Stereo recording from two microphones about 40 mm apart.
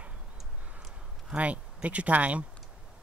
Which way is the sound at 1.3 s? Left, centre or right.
Right.